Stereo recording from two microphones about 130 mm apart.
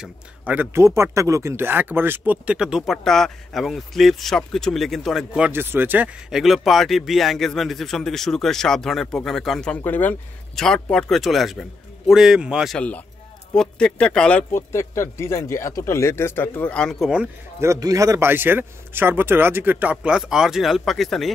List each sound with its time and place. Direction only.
0.0 s speech: 15° right (ahead or behind)
2.9 s speech: 5° left (ahead or behind)
5.5 s speech: 15° right (ahead or behind)
12.7 s speech: 10° left (ahead or behind)
14.5 s speech: 20° left (ahead or behind)
17.6 s a man's voice: 25° right (ahead or behind)
18.3 s speech: 15° right (ahead or behind); by 21.3 s centre (ahead or behind)